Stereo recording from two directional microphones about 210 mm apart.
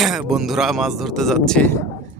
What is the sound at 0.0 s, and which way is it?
Speech, centre (ahead or behind).